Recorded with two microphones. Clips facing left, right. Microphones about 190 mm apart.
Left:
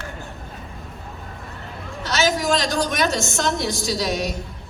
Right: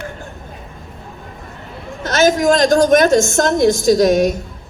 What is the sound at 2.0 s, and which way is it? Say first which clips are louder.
A woman's voice: right 8 dB; 50° right (ahead or behind).